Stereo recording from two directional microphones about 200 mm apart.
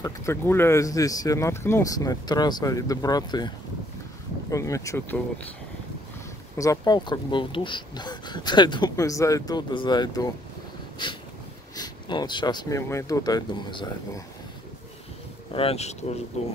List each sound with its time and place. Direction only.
0.0 s speech: 15° left (ahead or behind)
6.5 s speech: 15° left (ahead or behind)
15.5 s speech: 30° left (ahead or behind)